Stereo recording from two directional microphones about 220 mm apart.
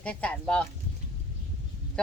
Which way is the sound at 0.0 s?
5° left (ahead or behind).